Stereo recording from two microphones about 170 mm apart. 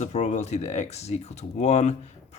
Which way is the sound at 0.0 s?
40° left (ahead or behind).